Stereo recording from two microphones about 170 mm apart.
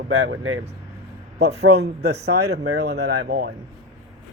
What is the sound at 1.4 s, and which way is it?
Speech, 75° right (ahead or behind).